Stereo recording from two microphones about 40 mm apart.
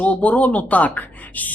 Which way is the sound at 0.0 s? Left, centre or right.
Left.